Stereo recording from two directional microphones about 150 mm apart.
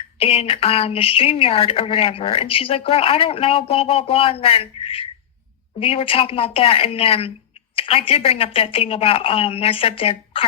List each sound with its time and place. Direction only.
0.2 s speech: 40° left (ahead or behind)